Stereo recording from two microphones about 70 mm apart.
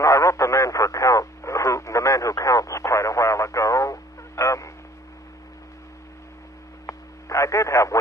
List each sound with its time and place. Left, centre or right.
0.0 s radio: left
6.9 s radio: left